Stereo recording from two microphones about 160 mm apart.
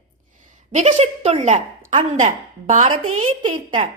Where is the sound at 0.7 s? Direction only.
45° right (ahead or behind).